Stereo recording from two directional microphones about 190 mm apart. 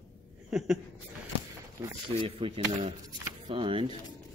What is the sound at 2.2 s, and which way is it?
Speech, 30° right (ahead or behind).